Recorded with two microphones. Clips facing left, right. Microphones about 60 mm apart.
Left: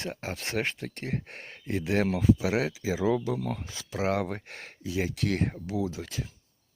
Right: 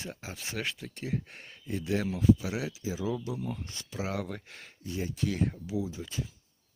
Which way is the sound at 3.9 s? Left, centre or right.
Left.